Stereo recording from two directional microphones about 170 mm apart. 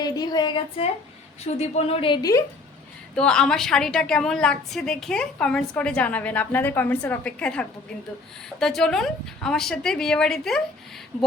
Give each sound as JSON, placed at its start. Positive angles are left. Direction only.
{"t": 0.0, "sound": "a woman's voice", "side_deg": 25}
{"t": 1.5, "sound": "a woman's voice", "side_deg": 40}
{"t": 3.2, "sound": "a woman's voice", "side_deg": 5}